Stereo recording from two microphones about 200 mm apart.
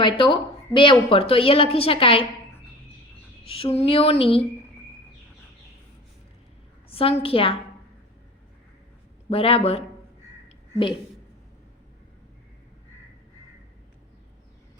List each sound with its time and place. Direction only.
0.0 s a woman's voice: 25° left (ahead or behind)
3.5 s a woman's voice: 30° left (ahead or behind)
6.8 s a woman's voice: 30° left (ahead or behind)
9.3 s a woman's voice: 30° left (ahead or behind)